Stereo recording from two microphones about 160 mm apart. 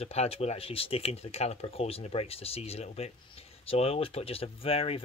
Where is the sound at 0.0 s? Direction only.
40° left (ahead or behind).